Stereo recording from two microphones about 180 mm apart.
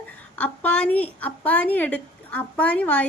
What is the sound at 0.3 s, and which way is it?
A woman's voice, 10° left (ahead or behind).